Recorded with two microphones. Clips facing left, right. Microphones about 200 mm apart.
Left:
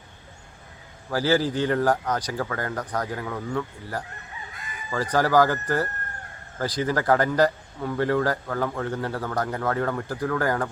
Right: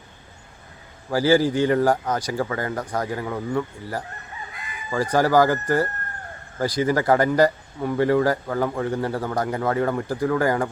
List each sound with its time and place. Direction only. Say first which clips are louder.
1.1 s speech: right 4 dB; 10° right (ahead or behind)